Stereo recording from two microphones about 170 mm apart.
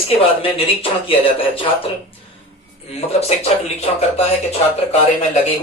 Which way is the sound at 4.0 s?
40° left (ahead or behind).